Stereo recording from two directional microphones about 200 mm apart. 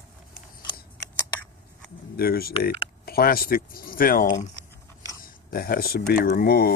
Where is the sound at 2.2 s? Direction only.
50° left (ahead or behind).